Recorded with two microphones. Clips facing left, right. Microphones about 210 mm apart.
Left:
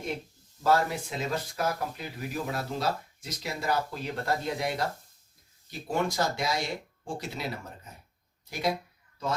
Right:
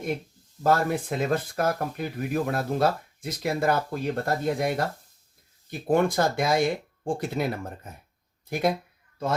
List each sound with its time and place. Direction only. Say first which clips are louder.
0.6 s speech: right 3 dB; 50° right (ahead or behind)